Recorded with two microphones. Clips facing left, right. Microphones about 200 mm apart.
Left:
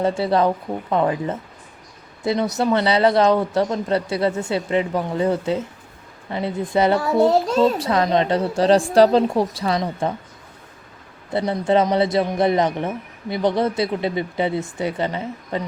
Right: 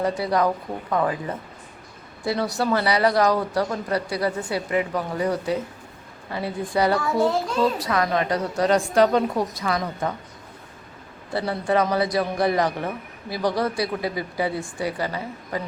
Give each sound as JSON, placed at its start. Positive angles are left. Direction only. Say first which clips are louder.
{"t": 0.0, "sound": "speech", "louder": "left 3 dB", "side_deg": 25}
{"t": 11.3, "sound": "speech", "louder": "left 4 dB", "side_deg": 20}